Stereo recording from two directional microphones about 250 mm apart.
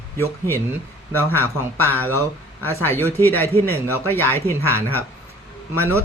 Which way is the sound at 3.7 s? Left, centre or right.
Centre.